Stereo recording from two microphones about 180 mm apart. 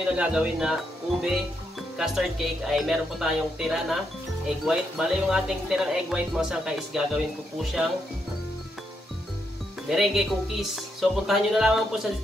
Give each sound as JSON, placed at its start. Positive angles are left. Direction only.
{"t": 0.1, "sound": "speech", "side_deg": -5}
{"t": 2.0, "sound": "speech", "side_deg": 0}
{"t": 9.8, "sound": "speech", "side_deg": 0}